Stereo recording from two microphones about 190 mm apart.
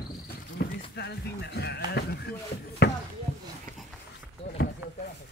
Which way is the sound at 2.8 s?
60° left (ahead or behind).